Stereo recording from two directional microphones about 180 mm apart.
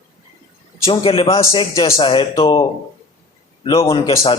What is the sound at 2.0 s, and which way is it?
A man's voice, 30° left (ahead or behind).